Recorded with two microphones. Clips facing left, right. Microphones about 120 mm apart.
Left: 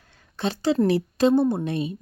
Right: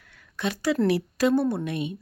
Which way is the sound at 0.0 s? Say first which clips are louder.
Left 2 dB; 30° left (ahead or behind).